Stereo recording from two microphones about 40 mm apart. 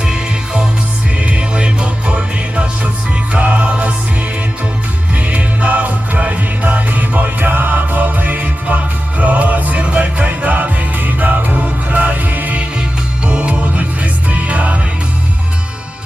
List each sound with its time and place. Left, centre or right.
0.0 s music: right
5.1 s music: right
13.2 s music: right